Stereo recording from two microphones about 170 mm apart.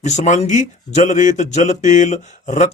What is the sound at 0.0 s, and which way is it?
A man's voice, 45° left (ahead or behind).